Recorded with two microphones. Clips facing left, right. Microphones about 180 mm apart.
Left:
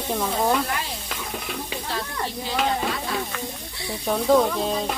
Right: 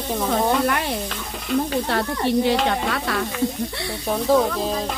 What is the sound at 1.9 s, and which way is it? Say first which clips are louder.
Stir: right 8 dB; 65° right (ahead or behind).